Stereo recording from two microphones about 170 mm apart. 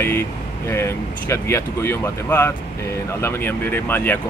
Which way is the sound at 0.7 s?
15° left (ahead or behind).